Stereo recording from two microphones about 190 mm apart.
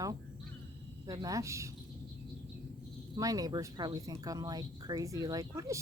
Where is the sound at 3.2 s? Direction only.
20° right (ahead or behind).